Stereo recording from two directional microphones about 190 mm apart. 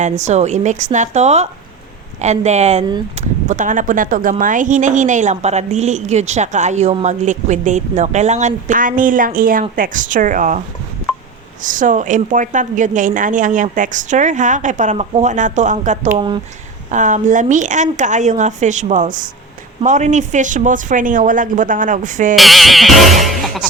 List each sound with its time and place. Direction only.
0.0 s speech: 35° right (ahead or behind)
11.6 s speech: 45° right (ahead or behind)
16.1 s speech: 25° right (ahead or behind)
16.9 s speech: 40° right (ahead or behind)
22.4 s music: centre (ahead or behind)